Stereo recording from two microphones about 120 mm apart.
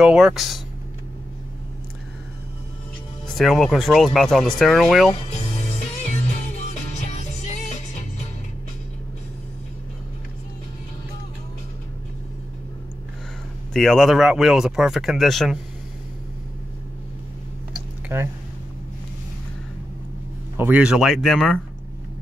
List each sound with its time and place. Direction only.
0.0 s speech: 5° right (ahead or behind)
3.3 s speech: centre (ahead or behind)
13.7 s speech: 5° left (ahead or behind)
18.0 s speech: 20° right (ahead or behind)
20.5 s speech: 15° right (ahead or behind); by 21.5 s centre (ahead or behind)